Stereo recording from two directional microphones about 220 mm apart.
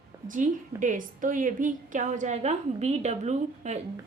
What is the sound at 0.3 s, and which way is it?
A woman's voice, 35° right (ahead or behind).